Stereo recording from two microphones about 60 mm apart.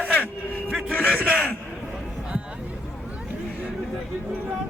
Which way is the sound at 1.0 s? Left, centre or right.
Centre.